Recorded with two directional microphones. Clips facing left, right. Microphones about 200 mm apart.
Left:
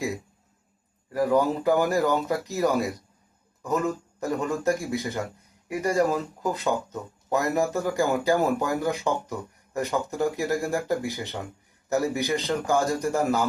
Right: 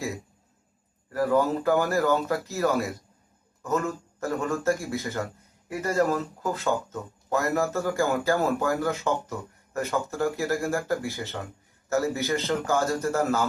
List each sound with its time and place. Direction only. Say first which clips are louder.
1.1 s speech: left 1 dB; 15° left (ahead or behind)